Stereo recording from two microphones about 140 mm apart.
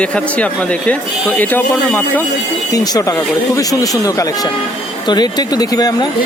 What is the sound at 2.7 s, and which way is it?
Speech, 25° left (ahead or behind).